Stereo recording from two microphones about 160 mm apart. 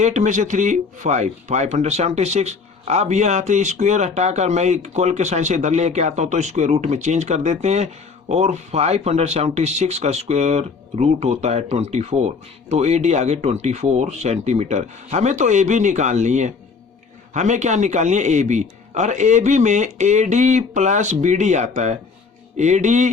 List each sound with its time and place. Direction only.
0.0 s speech: 50° right (ahead or behind)